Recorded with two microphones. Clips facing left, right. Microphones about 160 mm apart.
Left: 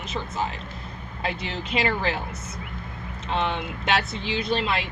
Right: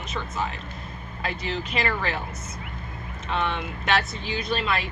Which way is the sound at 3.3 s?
25° left (ahead or behind).